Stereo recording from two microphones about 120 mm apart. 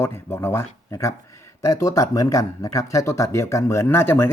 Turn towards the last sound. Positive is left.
turn(degrees=20)  # may be behind; listen again after turning